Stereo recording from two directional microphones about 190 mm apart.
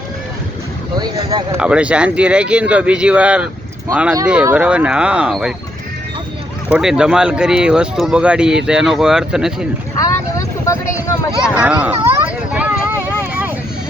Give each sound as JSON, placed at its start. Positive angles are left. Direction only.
{"t": 0.9, "sound": "speech", "side_deg": -20}
{"t": 1.5, "sound": "speech", "side_deg": -5}
{"t": 6.7, "sound": "speech", "side_deg": -5}
{"t": 10.7, "sound": "a sound", "side_deg": 15}
{"t": 11.5, "sound": "speech", "side_deg": -5}
{"t": 12.0, "sound": "a sound", "side_deg": -10}